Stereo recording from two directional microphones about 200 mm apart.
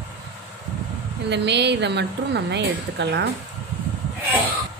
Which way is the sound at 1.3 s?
60° right (ahead or behind).